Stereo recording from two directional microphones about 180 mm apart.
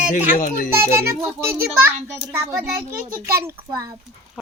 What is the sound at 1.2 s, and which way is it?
Child singing, 15° right (ahead or behind).